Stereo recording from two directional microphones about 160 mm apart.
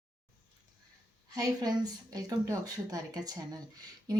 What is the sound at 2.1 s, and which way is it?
Speech, 25° right (ahead or behind).